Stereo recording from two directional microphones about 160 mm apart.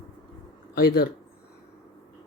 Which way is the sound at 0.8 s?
80° left.